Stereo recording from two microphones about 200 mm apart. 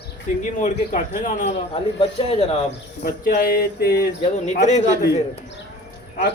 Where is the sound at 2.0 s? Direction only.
30° left (ahead or behind).